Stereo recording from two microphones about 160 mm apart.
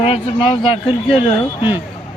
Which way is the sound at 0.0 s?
35° left (ahead or behind).